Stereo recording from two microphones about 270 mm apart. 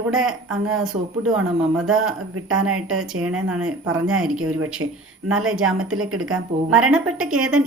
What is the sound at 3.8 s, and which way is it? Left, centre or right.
Speech, right.